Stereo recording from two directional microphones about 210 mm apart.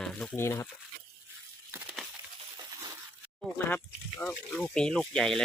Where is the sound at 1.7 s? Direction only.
5° right (ahead or behind).